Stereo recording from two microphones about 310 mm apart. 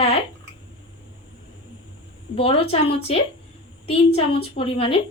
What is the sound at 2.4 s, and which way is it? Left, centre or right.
Dishes, centre.